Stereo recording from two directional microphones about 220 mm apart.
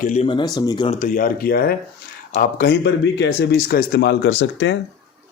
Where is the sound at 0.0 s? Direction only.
35° left (ahead or behind).